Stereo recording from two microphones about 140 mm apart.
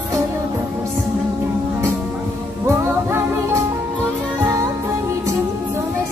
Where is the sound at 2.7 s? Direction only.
20° right (ahead or behind).